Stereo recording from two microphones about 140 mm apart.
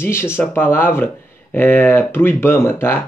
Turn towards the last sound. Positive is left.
turn(degrees=15)  # may be behind; listen again after turning